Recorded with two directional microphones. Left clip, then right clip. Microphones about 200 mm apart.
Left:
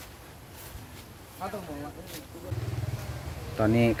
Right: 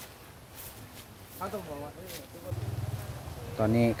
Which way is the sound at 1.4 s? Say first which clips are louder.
Left 1 dB; 50° right (ahead or behind).